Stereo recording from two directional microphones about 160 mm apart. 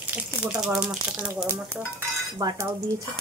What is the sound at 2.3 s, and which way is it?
Speech, 20° right (ahead or behind).